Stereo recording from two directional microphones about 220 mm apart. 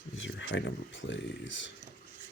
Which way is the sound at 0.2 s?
60° left (ahead or behind).